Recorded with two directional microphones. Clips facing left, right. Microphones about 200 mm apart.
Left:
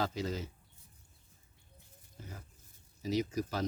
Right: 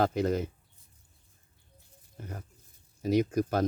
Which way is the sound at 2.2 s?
55° right (ahead or behind).